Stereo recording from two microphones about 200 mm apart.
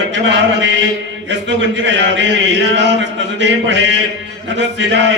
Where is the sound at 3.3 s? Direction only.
65° right (ahead or behind).